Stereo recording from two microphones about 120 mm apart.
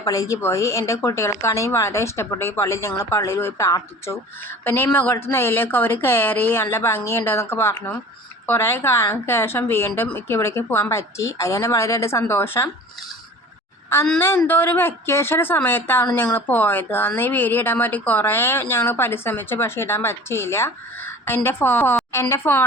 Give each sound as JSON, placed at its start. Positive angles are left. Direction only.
{"t": 0.0, "sound": "speech", "side_deg": 30}
{"t": 14.2, "sound": "speech", "side_deg": 15}